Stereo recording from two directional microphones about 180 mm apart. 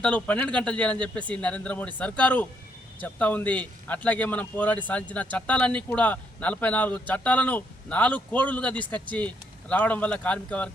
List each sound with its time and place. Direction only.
0.0 s speech: 5° left (ahead or behind)